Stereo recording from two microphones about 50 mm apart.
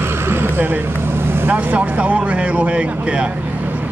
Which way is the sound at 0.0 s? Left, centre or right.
Right.